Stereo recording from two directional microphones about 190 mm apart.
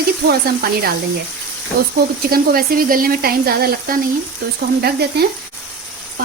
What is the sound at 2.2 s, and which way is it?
A woman's voice, 55° right (ahead or behind).